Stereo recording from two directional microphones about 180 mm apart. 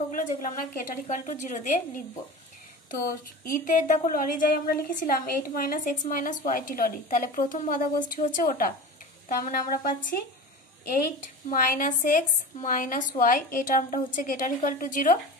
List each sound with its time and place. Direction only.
0.1 s a woman's voice: 45° left (ahead or behind)
3.4 s a woman's voice: 50° left (ahead or behind)
11.4 s a woman's voice: 50° left (ahead or behind)